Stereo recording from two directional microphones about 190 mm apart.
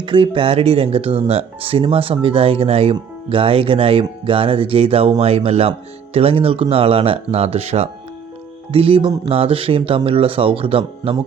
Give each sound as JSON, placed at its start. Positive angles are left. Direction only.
{"t": 0.0, "sound": "speech", "side_deg": -25}